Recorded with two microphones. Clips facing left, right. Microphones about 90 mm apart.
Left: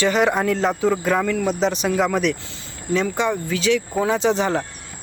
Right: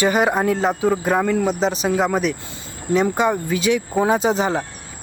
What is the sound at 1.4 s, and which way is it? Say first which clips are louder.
Speech: right 1 dB; 5° right (ahead or behind).